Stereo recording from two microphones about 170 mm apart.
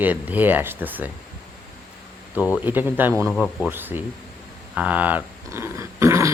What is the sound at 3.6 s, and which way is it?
Speech, 10° right (ahead or behind).